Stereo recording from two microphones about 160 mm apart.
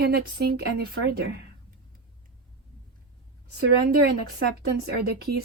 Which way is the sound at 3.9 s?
90° right.